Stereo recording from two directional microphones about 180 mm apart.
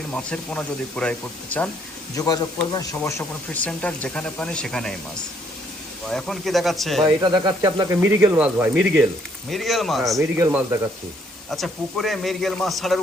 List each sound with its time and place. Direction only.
0.1 s speech: 5° left (ahead or behind)
2.1 s speech: 20° left (ahead or behind); by 4.9 s 5° left (ahead or behind)
6.1 s a man's voice: centre (ahead or behind)
7.0 s a man's voice: 20° right (ahead or behind); by 10.2 s centre (ahead or behind)
10.2 s speech: 15° right (ahead or behind)
11.5 s a man's voice: centre (ahead or behind)